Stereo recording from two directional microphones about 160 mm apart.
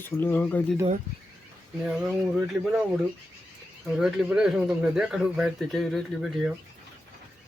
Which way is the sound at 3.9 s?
5° right (ahead or behind).